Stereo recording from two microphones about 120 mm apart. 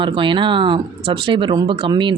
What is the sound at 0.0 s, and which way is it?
Speech, 45° right (ahead or behind).